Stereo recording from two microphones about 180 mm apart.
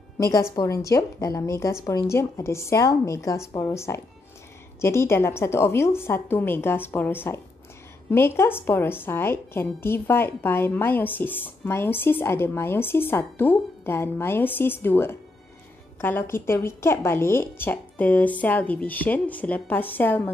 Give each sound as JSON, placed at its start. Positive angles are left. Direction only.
{"t": 0.2, "sound": "a woman's voice", "side_deg": 15}